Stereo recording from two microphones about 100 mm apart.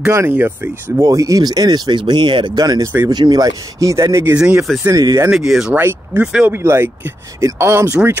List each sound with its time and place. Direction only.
0.0 s speech: 25° right (ahead or behind)
4.4 s speech: 10° right (ahead or behind)
4.8 s speech: 35° right (ahead or behind)
5.3 s speech: 5° right (ahead or behind)
5.8 s speech: 20° right (ahead or behind)